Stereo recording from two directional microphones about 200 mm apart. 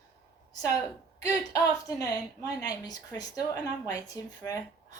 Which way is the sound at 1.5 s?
20° left (ahead or behind).